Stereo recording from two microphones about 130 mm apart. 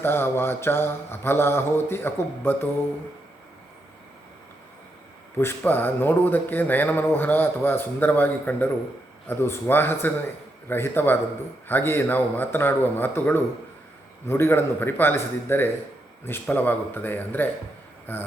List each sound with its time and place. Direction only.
0.0 s a man's voice: 15° left (ahead or behind)
5.4 s a man's voice: 15° left (ahead or behind)